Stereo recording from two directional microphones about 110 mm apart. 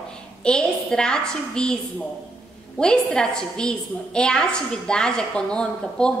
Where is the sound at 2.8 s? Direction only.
5° left (ahead or behind).